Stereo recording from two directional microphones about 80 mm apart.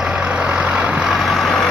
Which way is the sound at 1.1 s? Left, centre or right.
Centre.